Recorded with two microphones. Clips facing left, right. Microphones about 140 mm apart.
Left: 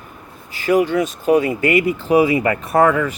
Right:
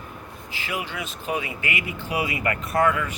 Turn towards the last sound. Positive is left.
turn(degrees=35)  # may be behind; listen again after turning